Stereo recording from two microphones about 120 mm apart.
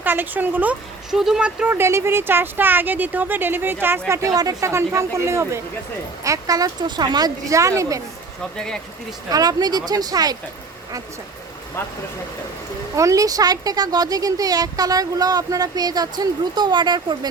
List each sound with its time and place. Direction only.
0.0 s speech: 15° right (ahead or behind)
4.1 s speech: 30° right (ahead or behind)
8.5 s speech: 5° left (ahead or behind)
9.3 s speech: 35° right (ahead or behind)
13.0 s speech: 30° right (ahead or behind)